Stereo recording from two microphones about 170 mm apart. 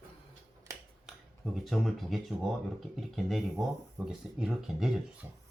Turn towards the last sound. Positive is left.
turn(degrees=0)  # may be behind; listen again after turning